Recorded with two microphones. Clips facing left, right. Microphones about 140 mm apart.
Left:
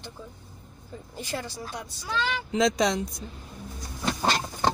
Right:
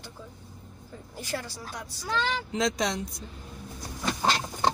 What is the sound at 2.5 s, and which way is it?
Speech, 90° left.